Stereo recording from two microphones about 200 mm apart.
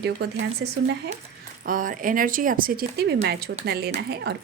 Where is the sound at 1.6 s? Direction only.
45° right (ahead or behind).